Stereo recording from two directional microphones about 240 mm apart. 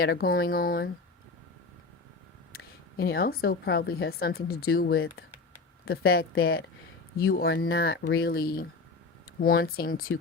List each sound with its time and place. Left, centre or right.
0.0 s a woman's voice: left
3.0 s a woman's voice: left